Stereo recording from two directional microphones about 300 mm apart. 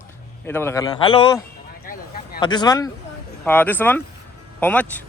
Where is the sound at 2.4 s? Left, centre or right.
Centre.